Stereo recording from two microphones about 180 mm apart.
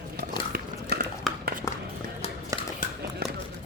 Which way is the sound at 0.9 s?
65° right (ahead or behind).